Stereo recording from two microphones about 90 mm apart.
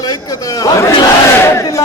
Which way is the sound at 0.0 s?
40° left (ahead or behind).